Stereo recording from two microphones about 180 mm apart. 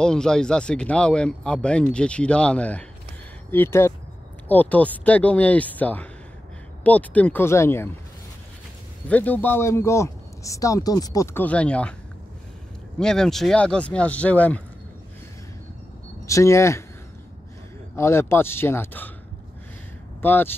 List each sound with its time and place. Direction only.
0.0 s speech: 5° left (ahead or behind)
9.1 s speech: 10° left (ahead or behind)
13.0 s speech: 5° left (ahead or behind)
16.3 s speech: 15° left (ahead or behind)
17.9 s speech: 15° left (ahead or behind)
20.2 s speech: 10° left (ahead or behind)